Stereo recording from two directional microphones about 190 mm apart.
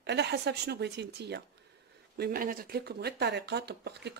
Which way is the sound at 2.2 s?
50° right (ahead or behind).